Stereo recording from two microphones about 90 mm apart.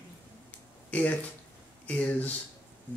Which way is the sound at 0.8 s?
15° left (ahead or behind).